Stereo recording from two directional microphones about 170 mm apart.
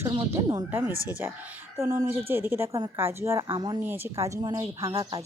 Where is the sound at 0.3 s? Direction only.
20° right (ahead or behind).